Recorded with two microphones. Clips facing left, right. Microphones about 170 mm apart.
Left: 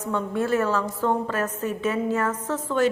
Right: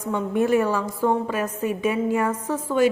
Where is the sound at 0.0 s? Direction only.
15° right (ahead or behind).